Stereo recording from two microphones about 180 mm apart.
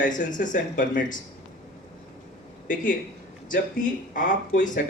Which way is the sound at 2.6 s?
50° left (ahead or behind).